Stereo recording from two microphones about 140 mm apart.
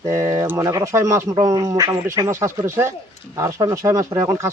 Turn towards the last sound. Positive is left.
turn(degrees=-25)  # may be behind; listen again after turning